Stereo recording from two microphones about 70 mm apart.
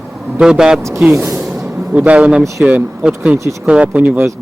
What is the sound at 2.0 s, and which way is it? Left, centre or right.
Speech, centre.